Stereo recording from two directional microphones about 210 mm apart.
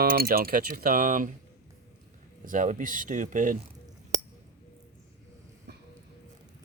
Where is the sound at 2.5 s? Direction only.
40° right (ahead or behind).